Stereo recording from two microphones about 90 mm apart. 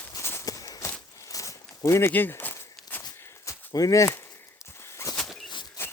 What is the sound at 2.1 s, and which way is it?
Walk, 25° left (ahead or behind).